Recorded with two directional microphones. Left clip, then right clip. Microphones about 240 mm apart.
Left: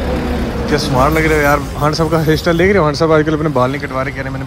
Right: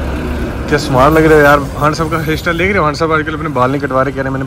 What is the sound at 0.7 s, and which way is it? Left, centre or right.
Speech, centre.